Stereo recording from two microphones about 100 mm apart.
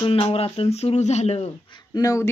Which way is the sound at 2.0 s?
35° left (ahead or behind).